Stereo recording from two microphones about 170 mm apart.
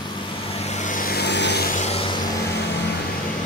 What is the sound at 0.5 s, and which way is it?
Vehicle, 40° left (ahead or behind).